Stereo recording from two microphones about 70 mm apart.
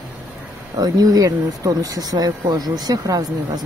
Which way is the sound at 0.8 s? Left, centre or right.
Right.